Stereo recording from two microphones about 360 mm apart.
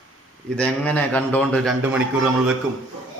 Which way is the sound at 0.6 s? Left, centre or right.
Centre.